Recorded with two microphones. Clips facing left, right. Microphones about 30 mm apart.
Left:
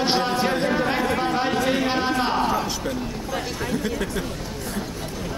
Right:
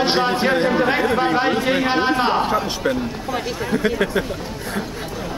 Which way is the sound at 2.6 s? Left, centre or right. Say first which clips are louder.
Right 6 dB; right.